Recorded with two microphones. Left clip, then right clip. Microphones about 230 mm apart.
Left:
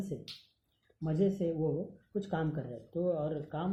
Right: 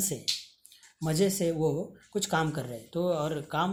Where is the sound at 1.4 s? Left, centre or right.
Right.